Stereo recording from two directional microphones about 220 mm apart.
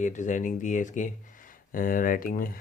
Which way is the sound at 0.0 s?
35° left (ahead or behind).